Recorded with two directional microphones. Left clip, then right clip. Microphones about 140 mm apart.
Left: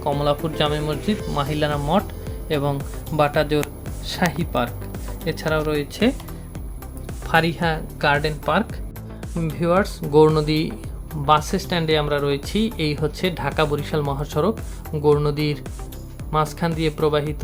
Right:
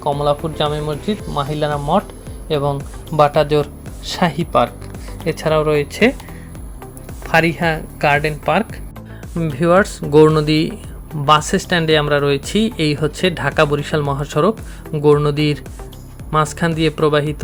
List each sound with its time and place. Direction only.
0.0 s speech: 5° right (ahead or behind); by 3.6 s 30° right (ahead or behind)
4.0 s speech: 40° right (ahead or behind)
7.3 s speech: 20° right (ahead or behind)
9.4 s speech: 30° right (ahead or behind)